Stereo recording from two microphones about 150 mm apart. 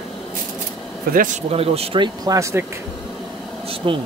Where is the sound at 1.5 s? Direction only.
40° right (ahead or behind).